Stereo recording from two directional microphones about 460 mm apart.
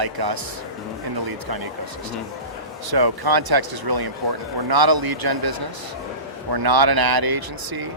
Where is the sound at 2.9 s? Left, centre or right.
Right.